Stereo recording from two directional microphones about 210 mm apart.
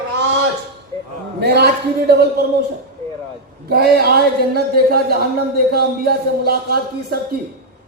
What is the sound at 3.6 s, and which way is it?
Speech, 50° right (ahead or behind).